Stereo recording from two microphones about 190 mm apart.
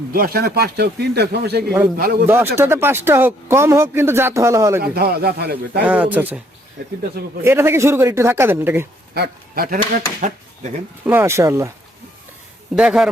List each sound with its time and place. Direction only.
0.1 s a man's voice: 50° right (ahead or behind)
2.2 s speech: 10° right (ahead or behind)
4.8 s a man's voice: 55° right (ahead or behind)
5.8 s speech: 5° right (ahead or behind)
7.4 s speech: 15° right (ahead or behind)
9.1 s speech: 55° right (ahead or behind)
11.0 s speech: 10° right (ahead or behind)
12.7 s speech: centre (ahead or behind)